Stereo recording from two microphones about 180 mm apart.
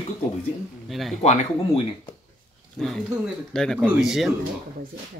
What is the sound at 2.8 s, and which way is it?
Speech, centre (ahead or behind).